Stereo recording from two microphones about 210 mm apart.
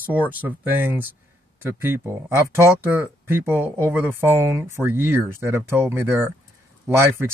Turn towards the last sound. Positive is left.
turn(degrees=-10)  # may be behind; listen again after turning